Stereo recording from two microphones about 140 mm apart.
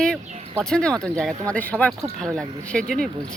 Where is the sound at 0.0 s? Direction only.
5° left (ahead or behind).